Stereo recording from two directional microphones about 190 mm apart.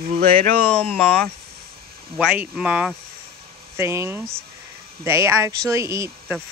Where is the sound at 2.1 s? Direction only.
5° right (ahead or behind).